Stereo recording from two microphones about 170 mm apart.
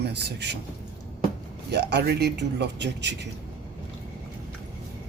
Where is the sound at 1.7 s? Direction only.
80° right.